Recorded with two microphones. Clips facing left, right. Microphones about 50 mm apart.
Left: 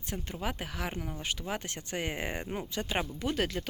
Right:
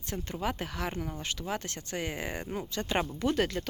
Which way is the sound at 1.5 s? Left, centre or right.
Centre.